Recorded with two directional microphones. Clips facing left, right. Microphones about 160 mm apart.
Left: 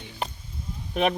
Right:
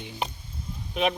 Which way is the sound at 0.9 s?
50° left (ahead or behind).